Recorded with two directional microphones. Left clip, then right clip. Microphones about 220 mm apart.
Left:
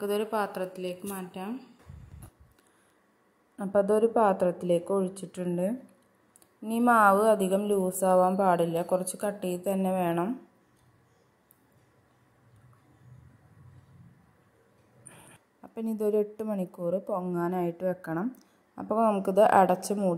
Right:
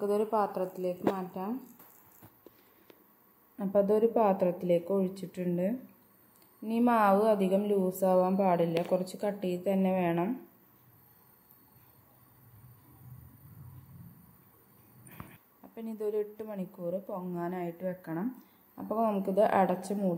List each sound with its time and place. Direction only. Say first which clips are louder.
0.0 s a woman's voice: even; 15° left (ahead or behind)
3.5 s a woman's voice: left 2 dB; 15° left (ahead or behind)
15.6 s a woman's voice: left 6 dB; 25° left (ahead or behind)